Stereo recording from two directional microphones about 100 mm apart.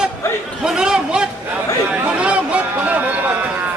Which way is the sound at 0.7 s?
5° right (ahead or behind).